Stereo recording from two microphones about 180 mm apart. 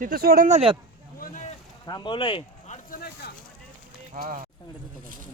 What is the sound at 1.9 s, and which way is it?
Speech, 25° left (ahead or behind).